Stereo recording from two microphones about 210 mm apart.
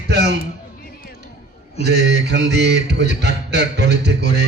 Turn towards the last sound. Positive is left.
turn(degrees=-55)  # may be behind; listen again after turning